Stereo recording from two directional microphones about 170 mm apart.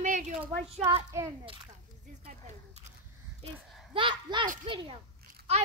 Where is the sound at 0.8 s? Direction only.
20° right (ahead or behind).